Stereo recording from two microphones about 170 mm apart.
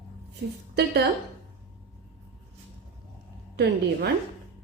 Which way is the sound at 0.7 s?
75° right (ahead or behind).